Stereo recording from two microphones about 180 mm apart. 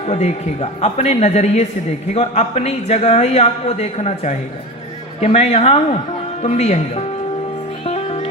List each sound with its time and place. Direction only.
0.1 s speech: 35° left (ahead or behind)
7.9 s music: 35° left (ahead or behind)